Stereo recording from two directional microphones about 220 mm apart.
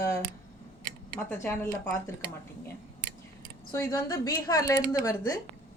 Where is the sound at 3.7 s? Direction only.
15° left (ahead or behind).